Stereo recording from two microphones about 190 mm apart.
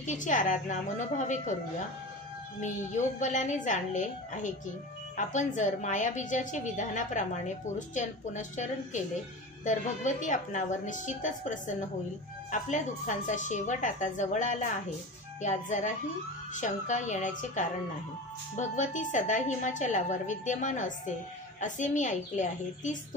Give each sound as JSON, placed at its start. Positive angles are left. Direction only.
{"t": 0.0, "sound": "a woman's voice", "side_deg": 40}
{"t": 2.6, "sound": "a woman's voice", "side_deg": 40}